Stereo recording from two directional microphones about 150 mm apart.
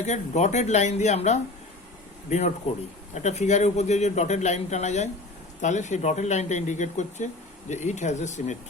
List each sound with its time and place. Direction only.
0.0 s speech: 50° left (ahead or behind)
3.2 s speech: 50° left (ahead or behind)